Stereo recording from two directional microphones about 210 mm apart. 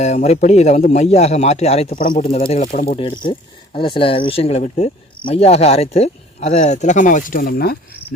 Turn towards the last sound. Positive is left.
turn(degrees=45)  # may be behind; listen again after turning